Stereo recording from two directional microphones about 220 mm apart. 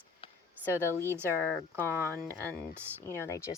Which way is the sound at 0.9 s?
10° right (ahead or behind).